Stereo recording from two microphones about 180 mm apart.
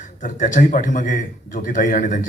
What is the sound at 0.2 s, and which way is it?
Speech, 45° left (ahead or behind).